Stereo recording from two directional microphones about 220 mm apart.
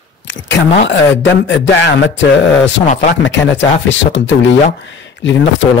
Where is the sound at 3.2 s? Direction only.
55° left (ahead or behind).